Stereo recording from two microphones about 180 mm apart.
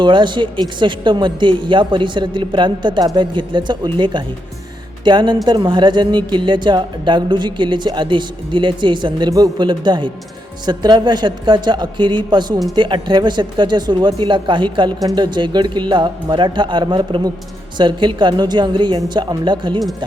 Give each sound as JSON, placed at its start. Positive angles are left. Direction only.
{"t": 0.0, "sound": "a woman's voice", "side_deg": -25}